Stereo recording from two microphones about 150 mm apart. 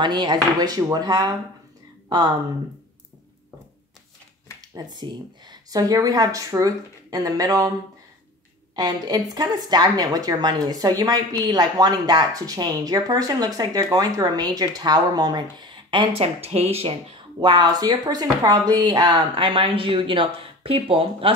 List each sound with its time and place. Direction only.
0.0 s a woman's voice: 30° right (ahead or behind)
4.7 s a woman's voice: 30° right (ahead or behind)
8.7 s a woman's voice: 25° right (ahead or behind)